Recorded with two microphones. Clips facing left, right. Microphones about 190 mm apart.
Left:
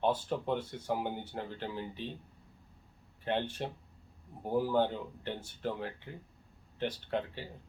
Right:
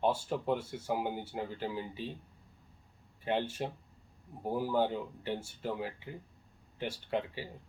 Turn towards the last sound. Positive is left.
turn(degrees=-10)  # may be behind; listen again after turning